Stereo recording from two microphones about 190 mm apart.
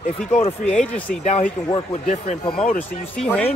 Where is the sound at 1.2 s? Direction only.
40° left (ahead or behind).